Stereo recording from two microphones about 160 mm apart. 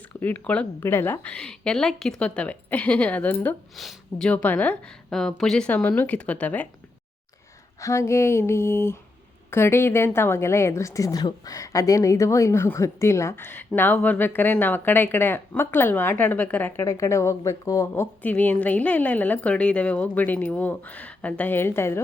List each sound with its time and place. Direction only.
0.2 s a woman's voice: 10° left (ahead or behind)
7.8 s a woman's voice: 20° left (ahead or behind)